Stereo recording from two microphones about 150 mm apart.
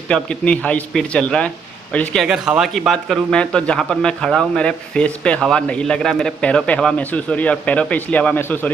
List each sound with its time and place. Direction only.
0.1 s speech: 5° left (ahead or behind)
2.2 s speech: 5° right (ahead or behind); by 8.7 s 10° left (ahead or behind)